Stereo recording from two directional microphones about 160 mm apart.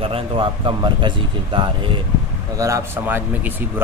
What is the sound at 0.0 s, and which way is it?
Speech, 35° right (ahead or behind).